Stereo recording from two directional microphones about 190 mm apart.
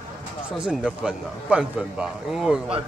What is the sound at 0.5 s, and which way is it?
A man's voice, 5° right (ahead or behind).